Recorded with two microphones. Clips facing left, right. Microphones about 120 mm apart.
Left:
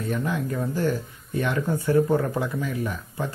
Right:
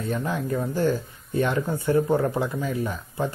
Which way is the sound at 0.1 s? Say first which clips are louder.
Right 1 dB; 25° right (ahead or behind).